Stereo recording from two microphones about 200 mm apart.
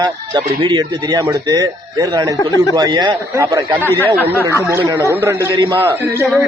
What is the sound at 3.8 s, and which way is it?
Speech, 10° left (ahead or behind).